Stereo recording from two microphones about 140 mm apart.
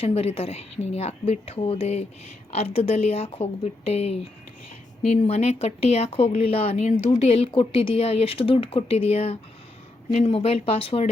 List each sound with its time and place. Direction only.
0.0 s speech: 45° left (ahead or behind)